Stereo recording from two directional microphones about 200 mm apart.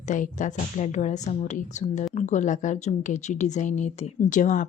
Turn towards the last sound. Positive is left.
turn(degrees=40)  # may be behind; listen again after turning